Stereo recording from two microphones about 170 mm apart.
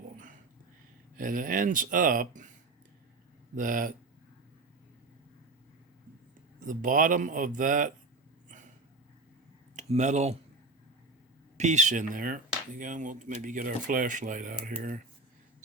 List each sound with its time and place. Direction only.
1.1 s speech: 55° right (ahead or behind)
3.5 s speech: 50° right (ahead or behind)
6.7 s speech: 50° right (ahead or behind)
9.7 s speech: 45° right (ahead or behind)
11.5 s speech: 45° right (ahead or behind)